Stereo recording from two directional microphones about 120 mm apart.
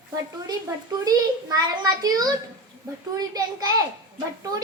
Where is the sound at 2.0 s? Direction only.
35° right (ahead or behind).